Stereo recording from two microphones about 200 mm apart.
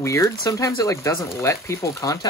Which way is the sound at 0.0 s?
15° left (ahead or behind).